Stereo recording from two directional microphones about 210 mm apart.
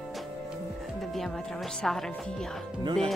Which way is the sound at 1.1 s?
Centre (ahead or behind).